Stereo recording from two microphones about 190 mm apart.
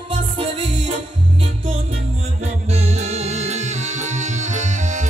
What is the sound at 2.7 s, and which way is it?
Music, 35° right (ahead or behind).